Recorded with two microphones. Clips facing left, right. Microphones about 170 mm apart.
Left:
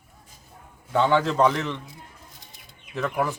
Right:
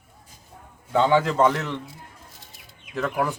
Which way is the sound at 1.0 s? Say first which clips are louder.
Right 1 dB; 5° right (ahead or behind).